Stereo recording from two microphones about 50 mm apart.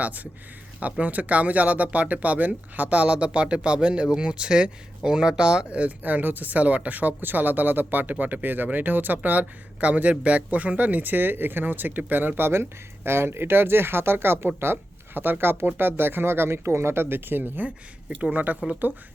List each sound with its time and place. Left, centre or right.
0.0 s speech: right
6.0 s speech: right
18.2 s speech: right